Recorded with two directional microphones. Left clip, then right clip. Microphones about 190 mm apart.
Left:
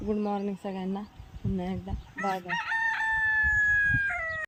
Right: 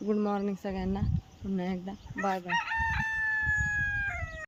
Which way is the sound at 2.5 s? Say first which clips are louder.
Left 1 dB; 55° right (ahead or behind).